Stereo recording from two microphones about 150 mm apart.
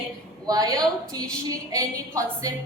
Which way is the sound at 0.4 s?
25° right (ahead or behind).